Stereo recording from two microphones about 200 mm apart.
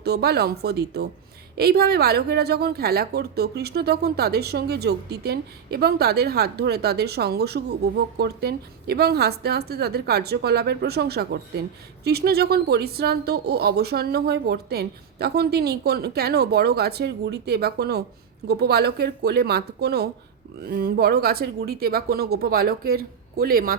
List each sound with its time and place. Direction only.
0.0 s a woman's voice: 55° right (ahead or behind)